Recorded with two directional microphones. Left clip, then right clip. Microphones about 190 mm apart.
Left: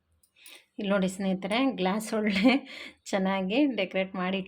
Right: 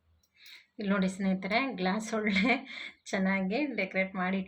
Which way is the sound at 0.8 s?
40° left (ahead or behind).